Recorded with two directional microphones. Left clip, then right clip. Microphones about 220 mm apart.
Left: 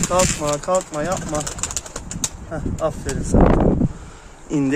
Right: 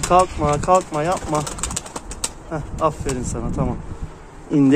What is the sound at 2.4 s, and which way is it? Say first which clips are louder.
Speech: right 3 dB; centre (ahead or behind).